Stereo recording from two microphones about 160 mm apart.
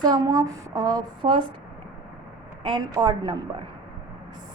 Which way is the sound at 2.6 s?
25° right (ahead or behind).